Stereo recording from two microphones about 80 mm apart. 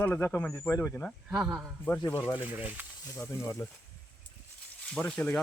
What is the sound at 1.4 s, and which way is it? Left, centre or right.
Speech, centre.